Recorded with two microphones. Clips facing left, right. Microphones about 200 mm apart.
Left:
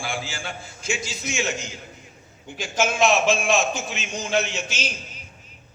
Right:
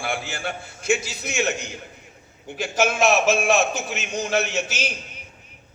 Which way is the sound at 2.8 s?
60° right (ahead or behind).